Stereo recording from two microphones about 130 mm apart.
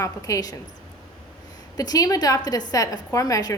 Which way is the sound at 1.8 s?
30° left (ahead or behind).